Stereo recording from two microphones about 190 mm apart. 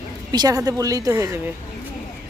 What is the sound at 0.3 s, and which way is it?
A woman's voice, 20° right (ahead or behind).